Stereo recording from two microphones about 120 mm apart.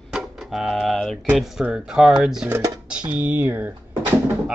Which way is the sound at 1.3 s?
5° right (ahead or behind).